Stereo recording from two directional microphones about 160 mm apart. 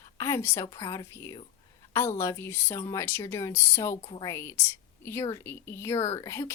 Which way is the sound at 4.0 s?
30° left (ahead or behind).